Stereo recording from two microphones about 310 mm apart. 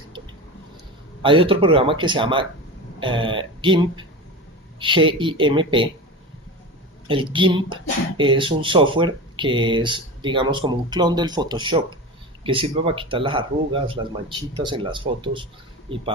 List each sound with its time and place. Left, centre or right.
1.2 s speech: centre
7.1 s speech: centre